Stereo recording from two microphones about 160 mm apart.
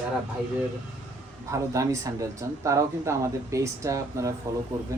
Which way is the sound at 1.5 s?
20° right (ahead or behind).